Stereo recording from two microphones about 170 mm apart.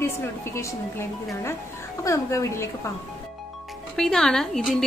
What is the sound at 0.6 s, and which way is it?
A woman's voice, 15° left (ahead or behind).